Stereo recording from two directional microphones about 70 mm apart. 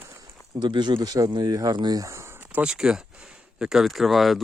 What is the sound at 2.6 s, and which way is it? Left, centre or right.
Speech, centre.